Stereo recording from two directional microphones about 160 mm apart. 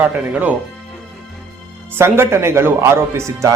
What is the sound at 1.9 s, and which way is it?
Speech, 15° right (ahead or behind).